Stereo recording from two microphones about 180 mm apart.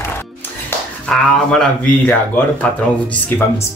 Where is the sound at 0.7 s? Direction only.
5° left (ahead or behind).